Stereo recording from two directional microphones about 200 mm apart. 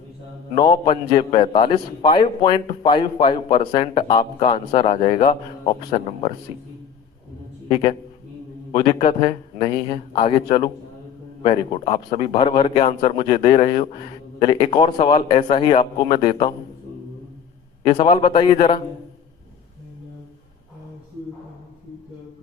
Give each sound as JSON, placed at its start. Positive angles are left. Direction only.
{"t": 0.5, "sound": "a man's voice", "side_deg": 25}
{"t": 7.7, "sound": "a man's voice", "side_deg": 25}
{"t": 17.8, "sound": "a man's voice", "side_deg": 25}